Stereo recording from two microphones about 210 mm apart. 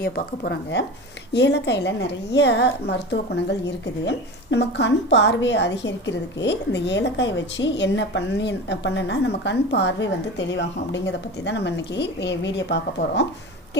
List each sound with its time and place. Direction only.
0.0 s a woman's voice: 55° left (ahead or behind)
4.5 s a woman's voice: 55° left (ahead or behind)